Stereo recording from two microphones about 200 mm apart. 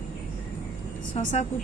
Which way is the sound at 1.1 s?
30° left (ahead or behind).